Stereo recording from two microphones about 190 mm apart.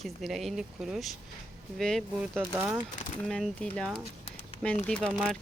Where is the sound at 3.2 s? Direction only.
5° left (ahead or behind).